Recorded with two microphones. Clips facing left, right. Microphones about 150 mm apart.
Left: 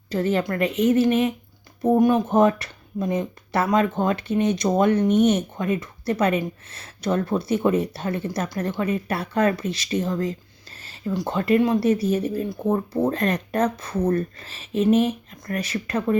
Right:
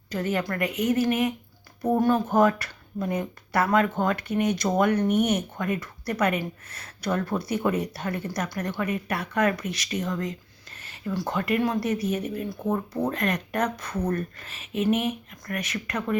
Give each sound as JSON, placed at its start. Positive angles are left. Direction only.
{"t": 0.1, "sound": "speech", "side_deg": 30}